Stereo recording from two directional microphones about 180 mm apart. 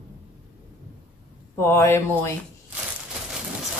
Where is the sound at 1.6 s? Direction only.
15° left (ahead or behind).